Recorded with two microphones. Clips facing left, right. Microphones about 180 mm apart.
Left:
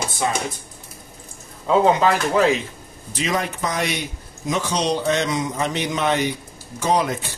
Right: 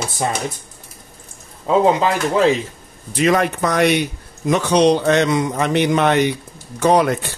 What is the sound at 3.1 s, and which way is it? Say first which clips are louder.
A man's voice: right 8 dB; 60° right (ahead or behind).